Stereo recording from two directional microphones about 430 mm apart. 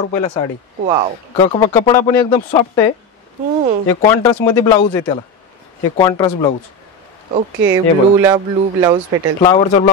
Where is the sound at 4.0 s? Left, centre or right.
Centre.